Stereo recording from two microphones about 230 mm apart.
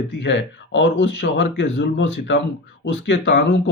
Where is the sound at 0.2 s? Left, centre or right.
Left.